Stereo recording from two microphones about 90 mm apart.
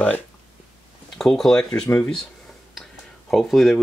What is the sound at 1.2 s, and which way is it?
Speech, 5° left (ahead or behind).